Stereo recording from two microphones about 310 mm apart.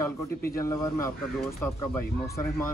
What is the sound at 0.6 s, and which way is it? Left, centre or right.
Speech, centre.